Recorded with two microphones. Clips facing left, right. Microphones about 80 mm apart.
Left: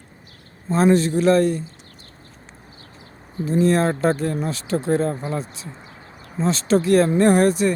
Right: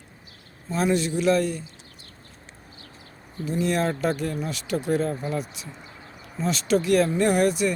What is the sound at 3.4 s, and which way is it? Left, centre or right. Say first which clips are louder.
Speech: left 6 dB; left.